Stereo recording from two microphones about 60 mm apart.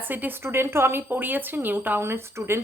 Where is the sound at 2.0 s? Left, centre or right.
Right.